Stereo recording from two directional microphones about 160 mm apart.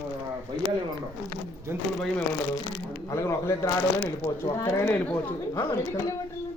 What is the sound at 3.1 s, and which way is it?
A man's voice, 20° left (ahead or behind).